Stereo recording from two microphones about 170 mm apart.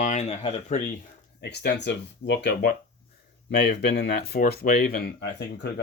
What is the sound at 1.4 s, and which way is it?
Speech, 75° left (ahead or behind).